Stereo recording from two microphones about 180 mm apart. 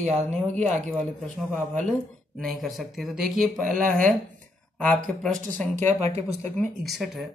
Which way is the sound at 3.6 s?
50° right (ahead or behind).